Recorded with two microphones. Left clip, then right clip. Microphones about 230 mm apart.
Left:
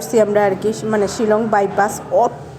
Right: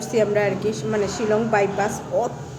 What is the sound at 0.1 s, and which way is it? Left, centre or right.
A woman's voice, centre.